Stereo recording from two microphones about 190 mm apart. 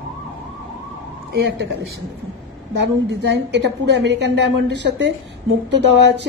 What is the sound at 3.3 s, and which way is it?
A woman's voice, 70° right (ahead or behind).